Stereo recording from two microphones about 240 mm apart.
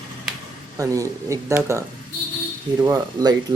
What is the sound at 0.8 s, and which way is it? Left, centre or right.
Speech, centre.